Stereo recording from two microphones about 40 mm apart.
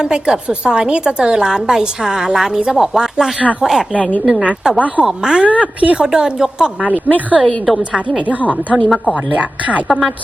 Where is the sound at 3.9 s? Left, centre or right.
Left.